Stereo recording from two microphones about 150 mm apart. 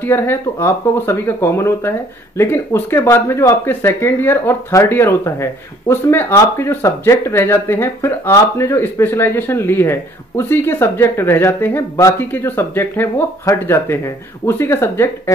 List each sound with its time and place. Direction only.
0.0 s speech: 15° left (ahead or behind)